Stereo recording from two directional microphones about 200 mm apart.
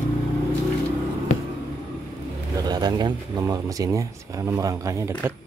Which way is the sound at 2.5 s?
20° right (ahead or behind).